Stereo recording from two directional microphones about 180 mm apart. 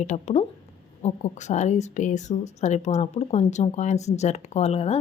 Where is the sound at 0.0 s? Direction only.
40° left (ahead or behind).